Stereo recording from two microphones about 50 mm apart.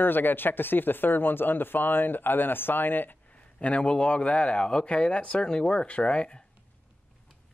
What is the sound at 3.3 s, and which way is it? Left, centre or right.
A man's voice, left.